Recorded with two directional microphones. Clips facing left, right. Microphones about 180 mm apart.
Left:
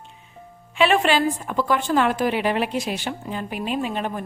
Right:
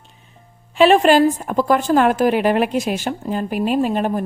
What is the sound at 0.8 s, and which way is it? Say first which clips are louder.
A woman's voice: right 7 dB; 40° right (ahead or behind).